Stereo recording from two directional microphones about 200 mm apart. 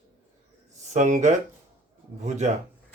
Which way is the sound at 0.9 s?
35° right (ahead or behind).